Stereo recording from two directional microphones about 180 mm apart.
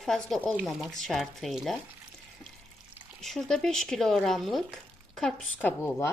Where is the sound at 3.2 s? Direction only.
Centre (ahead or behind).